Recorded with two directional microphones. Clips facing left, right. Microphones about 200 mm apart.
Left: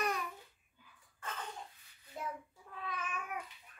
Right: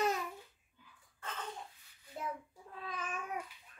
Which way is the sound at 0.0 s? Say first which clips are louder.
Right 3 dB; 25° right (ahead or behind).